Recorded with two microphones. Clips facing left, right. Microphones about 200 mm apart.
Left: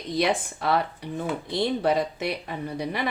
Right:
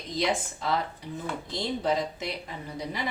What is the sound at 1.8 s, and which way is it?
Speech, 65° left (ahead or behind).